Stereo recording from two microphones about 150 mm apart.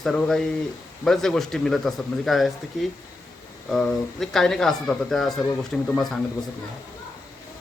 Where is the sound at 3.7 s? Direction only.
5° left (ahead or behind).